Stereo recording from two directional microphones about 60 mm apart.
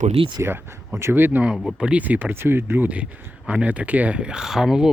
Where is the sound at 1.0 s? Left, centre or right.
Right.